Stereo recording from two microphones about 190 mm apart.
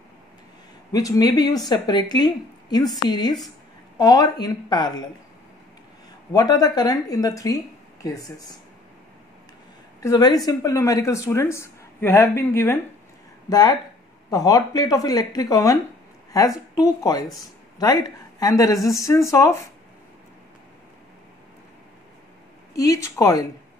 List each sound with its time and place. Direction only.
0.9 s a woman's voice: 20° left (ahead or behind)
6.3 s a woman's voice: 20° left (ahead or behind)
9.9 s a woman's voice: 20° left (ahead or behind)
18.4 s speech: 15° left (ahead or behind)
22.8 s speech: 15° left (ahead or behind)